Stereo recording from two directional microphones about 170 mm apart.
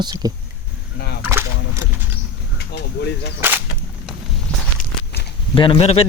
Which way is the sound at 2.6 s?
85° left.